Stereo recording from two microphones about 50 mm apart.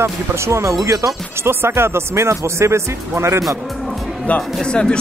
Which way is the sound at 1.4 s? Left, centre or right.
Right.